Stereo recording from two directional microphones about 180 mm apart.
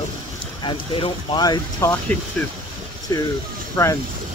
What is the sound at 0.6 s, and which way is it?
Speech, 25° left (ahead or behind).